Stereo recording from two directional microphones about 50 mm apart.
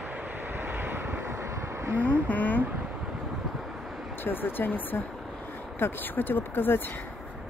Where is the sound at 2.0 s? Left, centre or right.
Left.